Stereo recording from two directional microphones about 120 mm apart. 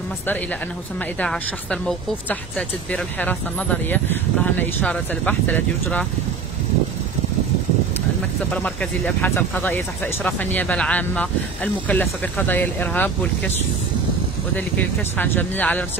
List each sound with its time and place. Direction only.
1.2 s speech: 5° left (ahead or behind)
8.5 s speech: 10° left (ahead or behind)
14.6 s speech: 15° left (ahead or behind)